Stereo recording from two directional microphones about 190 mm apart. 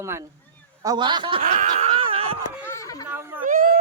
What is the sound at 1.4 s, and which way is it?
Speech, 45° right (ahead or behind).